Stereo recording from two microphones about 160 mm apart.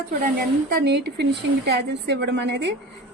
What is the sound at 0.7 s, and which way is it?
A woman's voice, 90° right.